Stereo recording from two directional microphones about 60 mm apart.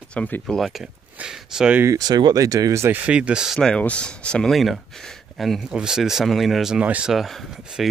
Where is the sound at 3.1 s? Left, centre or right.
Centre.